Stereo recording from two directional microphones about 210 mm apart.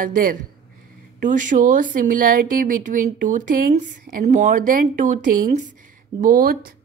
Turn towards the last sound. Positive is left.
turn(degrees=-45)  # may be behind; listen again after turning